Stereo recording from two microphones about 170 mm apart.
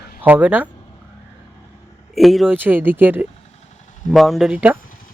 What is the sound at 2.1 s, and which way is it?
Speech, centre (ahead or behind).